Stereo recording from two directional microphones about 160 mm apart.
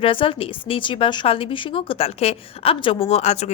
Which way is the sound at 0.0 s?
35° left (ahead or behind).